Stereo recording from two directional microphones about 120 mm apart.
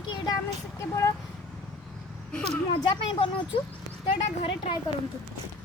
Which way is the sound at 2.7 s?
45° left (ahead or behind).